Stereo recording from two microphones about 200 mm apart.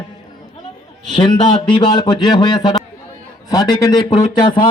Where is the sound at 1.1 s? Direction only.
25° left (ahead or behind).